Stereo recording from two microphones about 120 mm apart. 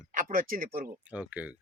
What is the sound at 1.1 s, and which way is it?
Speech, 10° right (ahead or behind).